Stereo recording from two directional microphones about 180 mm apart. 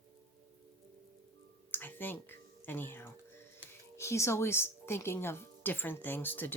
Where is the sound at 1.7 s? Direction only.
10° left (ahead or behind).